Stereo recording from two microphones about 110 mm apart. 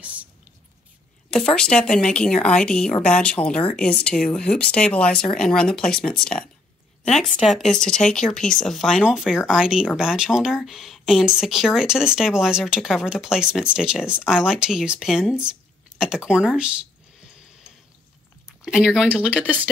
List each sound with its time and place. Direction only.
0.0 s whispering: 10° right (ahead or behind)
1.3 s a woman's voice: 5° left (ahead or behind)
18.7 s speech: 5° right (ahead or behind)